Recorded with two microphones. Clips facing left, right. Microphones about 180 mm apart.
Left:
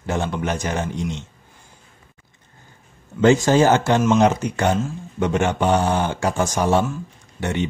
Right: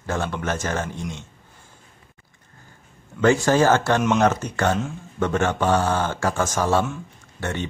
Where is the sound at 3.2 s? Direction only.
20° left (ahead or behind).